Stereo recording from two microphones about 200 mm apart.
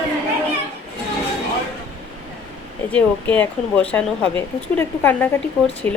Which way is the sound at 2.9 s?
5° left (ahead or behind).